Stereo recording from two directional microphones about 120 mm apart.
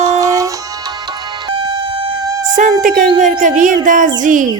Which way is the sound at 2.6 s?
90° right.